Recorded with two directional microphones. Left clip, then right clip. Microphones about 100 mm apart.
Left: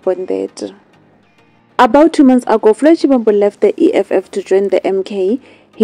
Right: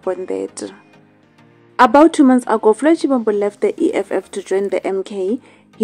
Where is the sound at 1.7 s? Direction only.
35° left (ahead or behind).